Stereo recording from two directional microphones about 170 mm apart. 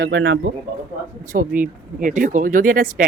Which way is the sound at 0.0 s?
70° right (ahead or behind).